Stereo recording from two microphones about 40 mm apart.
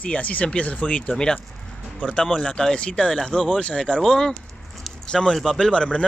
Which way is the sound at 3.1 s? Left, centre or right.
Centre.